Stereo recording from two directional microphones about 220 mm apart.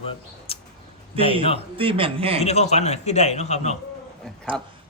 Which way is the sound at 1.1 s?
25° right (ahead or behind).